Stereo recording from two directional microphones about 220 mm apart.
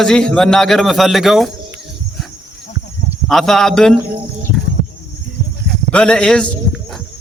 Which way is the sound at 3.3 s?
Centre (ahead or behind).